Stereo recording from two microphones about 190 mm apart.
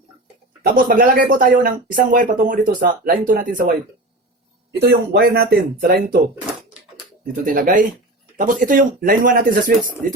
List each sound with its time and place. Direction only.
0.6 s speech: 50° right (ahead or behind)
4.8 s speech: 65° right (ahead or behind)
7.4 s speech: 45° right (ahead or behind)